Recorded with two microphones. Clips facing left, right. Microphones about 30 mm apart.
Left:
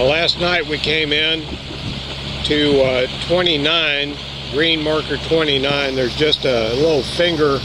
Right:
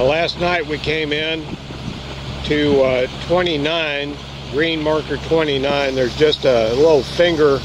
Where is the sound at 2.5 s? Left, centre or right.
Left.